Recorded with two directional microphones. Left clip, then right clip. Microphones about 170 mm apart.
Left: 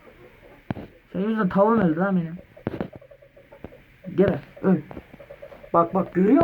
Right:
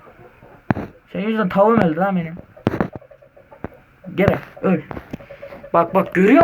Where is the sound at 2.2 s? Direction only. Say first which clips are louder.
Right 9 dB; 50° right (ahead or behind).